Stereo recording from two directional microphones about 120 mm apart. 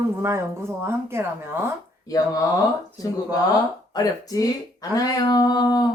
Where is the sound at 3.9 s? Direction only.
30° left (ahead or behind).